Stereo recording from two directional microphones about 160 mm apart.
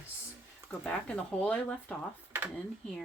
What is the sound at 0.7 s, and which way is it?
Speech, 5° left (ahead or behind).